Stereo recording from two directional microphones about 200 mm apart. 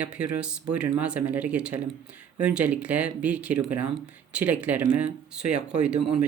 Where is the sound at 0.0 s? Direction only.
5° right (ahead or behind).